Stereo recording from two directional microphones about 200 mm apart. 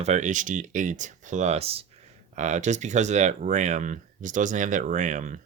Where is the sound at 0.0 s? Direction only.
35° right (ahead or behind).